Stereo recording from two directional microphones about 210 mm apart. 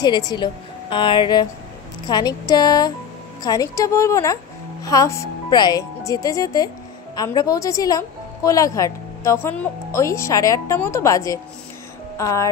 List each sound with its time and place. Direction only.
0.0 s a woman's voice: 20° left (ahead or behind)